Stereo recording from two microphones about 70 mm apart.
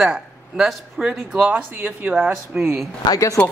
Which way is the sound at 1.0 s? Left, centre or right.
Centre.